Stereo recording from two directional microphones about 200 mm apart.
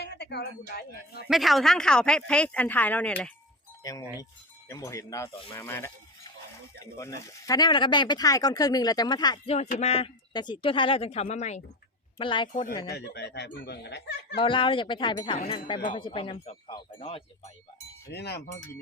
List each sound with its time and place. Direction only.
0.0 s speech: 55° left (ahead or behind)
1.3 s speech: centre (ahead or behind)
4.7 s speech: 15° left (ahead or behind)
9.6 s speech: 30° left (ahead or behind)
12.1 s speech: 25° left (ahead or behind)
12.9 s speech: 55° left (ahead or behind)
14.3 s speech: 25° left (ahead or behind)
18.1 s speech: 55° left (ahead or behind)